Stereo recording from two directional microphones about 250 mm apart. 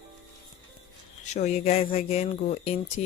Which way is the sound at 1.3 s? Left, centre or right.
Left.